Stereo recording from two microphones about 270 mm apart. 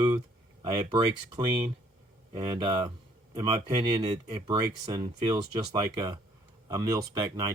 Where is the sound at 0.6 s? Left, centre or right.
Centre.